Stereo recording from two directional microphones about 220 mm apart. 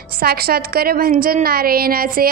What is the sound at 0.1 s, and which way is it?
A woman's voice, 45° right (ahead or behind).